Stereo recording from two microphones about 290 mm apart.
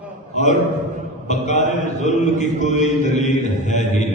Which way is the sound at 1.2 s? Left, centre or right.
Left.